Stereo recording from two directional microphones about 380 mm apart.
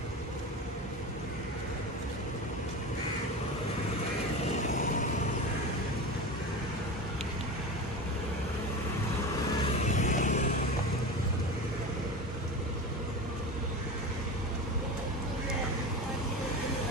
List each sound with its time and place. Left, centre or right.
9.8 s vehicle: centre